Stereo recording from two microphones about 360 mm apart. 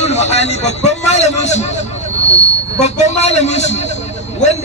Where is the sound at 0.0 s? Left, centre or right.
Centre.